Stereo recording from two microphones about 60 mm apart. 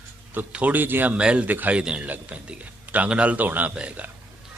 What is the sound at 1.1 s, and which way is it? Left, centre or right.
A man's voice, centre.